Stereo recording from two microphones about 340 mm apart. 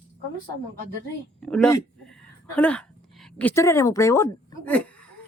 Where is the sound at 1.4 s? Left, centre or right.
Centre.